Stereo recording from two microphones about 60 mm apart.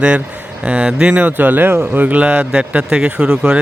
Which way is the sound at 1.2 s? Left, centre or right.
Right.